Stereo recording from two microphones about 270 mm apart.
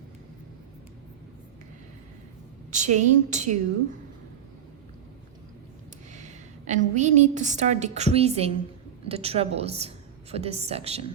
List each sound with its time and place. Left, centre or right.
2.6 s a woman's voice: right
6.1 s a woman's voice: right